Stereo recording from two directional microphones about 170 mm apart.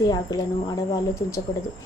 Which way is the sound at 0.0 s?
20° left (ahead or behind).